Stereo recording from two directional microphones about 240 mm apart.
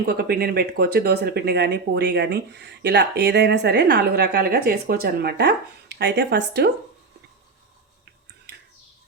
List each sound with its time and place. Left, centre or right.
0.0 s speech: right